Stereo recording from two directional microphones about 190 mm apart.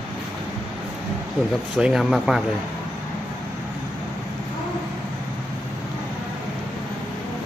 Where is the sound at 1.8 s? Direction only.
5° right (ahead or behind).